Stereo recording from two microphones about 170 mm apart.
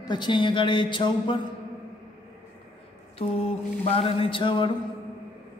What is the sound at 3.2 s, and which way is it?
Mantra, 35° left (ahead or behind).